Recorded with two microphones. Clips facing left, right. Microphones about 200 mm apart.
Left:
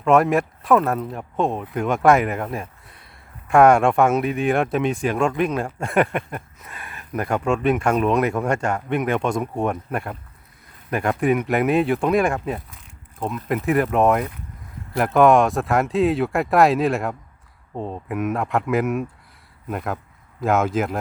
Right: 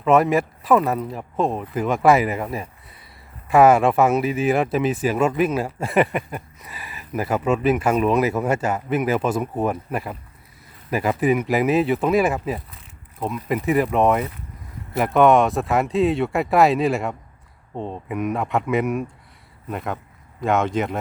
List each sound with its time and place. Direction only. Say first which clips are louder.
0.0 s speech: even; centre (ahead or behind)